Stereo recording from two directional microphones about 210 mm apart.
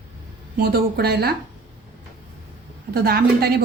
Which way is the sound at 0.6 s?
45° right (ahead or behind).